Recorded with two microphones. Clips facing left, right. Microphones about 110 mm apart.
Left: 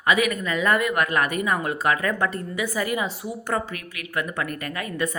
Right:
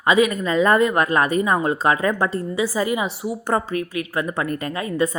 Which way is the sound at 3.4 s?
35° right (ahead or behind).